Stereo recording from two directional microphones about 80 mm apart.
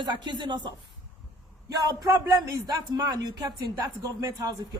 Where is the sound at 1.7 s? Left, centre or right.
Right.